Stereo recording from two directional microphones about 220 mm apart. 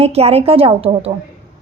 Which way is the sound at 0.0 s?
30° right (ahead or behind).